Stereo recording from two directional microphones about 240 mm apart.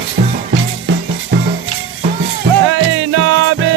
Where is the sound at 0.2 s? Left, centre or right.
Right.